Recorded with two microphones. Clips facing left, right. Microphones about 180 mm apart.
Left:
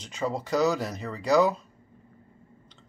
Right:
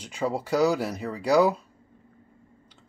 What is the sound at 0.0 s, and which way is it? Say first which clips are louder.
Speech: right 2 dB; 10° right (ahead or behind).